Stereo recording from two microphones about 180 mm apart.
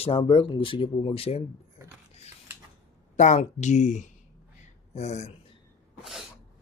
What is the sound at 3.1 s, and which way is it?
Speech, 40° left (ahead or behind).